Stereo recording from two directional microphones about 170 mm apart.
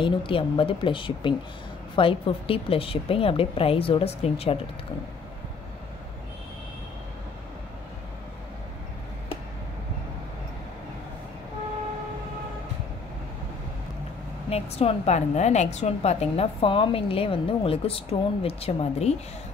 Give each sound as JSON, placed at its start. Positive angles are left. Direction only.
{"t": 0.0, "sound": "a woman's voice", "side_deg": 30}
{"t": 14.5, "sound": "a woman's voice", "side_deg": 35}